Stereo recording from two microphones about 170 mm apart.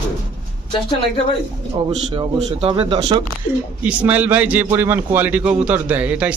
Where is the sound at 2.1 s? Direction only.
30° right (ahead or behind).